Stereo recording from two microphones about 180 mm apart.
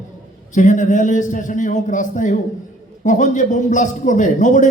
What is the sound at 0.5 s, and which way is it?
A man's voice, 45° left (ahead or behind).